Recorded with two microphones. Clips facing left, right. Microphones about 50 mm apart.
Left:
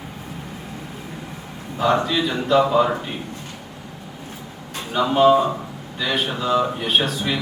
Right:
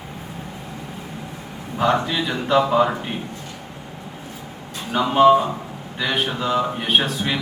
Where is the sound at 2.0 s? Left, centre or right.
Centre.